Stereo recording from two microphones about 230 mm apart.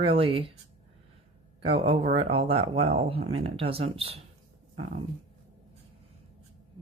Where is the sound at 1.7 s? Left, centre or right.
Right.